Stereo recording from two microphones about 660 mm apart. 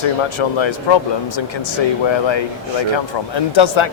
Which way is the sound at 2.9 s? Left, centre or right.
Left.